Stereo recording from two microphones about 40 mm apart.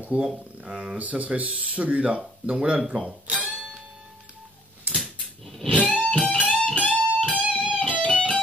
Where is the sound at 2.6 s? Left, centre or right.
Right.